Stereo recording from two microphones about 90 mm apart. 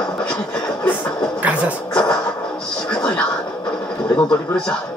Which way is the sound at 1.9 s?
10° left (ahead or behind).